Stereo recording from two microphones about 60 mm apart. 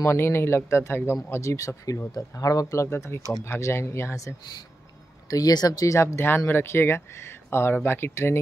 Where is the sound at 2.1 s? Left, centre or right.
Left.